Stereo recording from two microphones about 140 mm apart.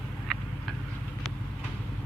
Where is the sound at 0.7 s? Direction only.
Centre (ahead or behind).